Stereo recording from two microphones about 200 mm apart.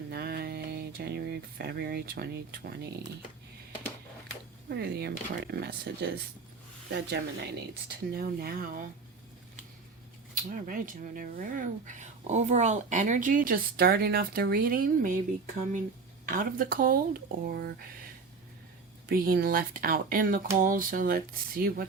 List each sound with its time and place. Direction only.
0.1 s speech: 50° right (ahead or behind)
4.7 s speech: 55° right (ahead or behind)
10.5 s speech: 45° right (ahead or behind)
16.3 s speech: 45° right (ahead or behind)
19.0 s speech: 45° right (ahead or behind)